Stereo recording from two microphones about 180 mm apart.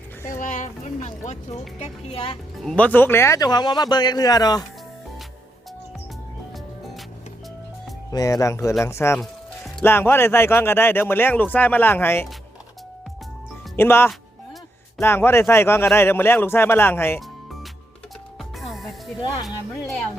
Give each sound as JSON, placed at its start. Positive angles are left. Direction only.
{"t": 0.3, "sound": "speech", "side_deg": 45}
{"t": 2.6, "sound": "speech", "side_deg": 10}
{"t": 8.1, "sound": "a man's voice", "side_deg": 20}
{"t": 9.1, "sound": "music", "side_deg": 0}
{"t": 9.8, "sound": "a man's voice", "side_deg": 10}
{"t": 13.7, "sound": "a man's voice", "side_deg": 10}
{"t": 18.3, "sound": "music", "side_deg": 0}
{"t": 19.5, "sound": "speech", "side_deg": 0}